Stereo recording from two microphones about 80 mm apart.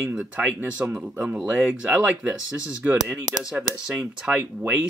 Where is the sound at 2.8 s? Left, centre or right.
Right.